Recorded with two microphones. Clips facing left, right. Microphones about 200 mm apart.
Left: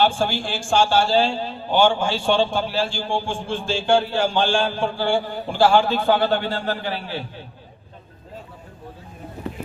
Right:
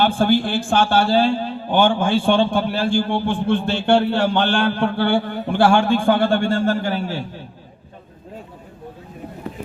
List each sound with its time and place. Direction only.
0.0 s a man's voice: 55° right (ahead or behind)